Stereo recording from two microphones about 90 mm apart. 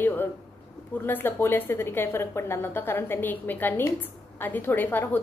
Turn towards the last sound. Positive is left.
turn(degrees=20)  # may be behind; listen again after turning